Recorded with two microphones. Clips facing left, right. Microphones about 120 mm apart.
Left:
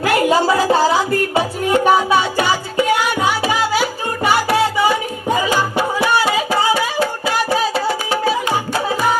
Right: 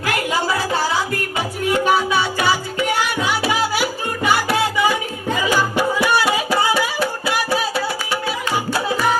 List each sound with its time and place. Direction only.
0.0 s music: 25° left (ahead or behind)
3.4 s music: 20° left (ahead or behind)
5.4 s music: 20° left (ahead or behind)